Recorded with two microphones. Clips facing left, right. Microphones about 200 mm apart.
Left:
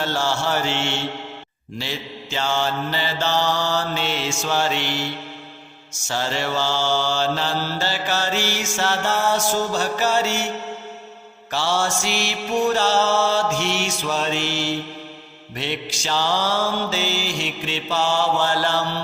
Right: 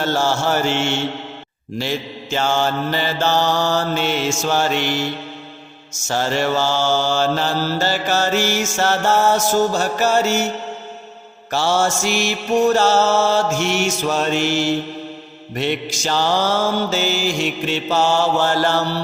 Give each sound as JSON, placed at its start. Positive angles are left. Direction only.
{"t": 0.0, "sound": "mantra", "side_deg": -45}
{"t": 11.5, "sound": "mantra", "side_deg": -45}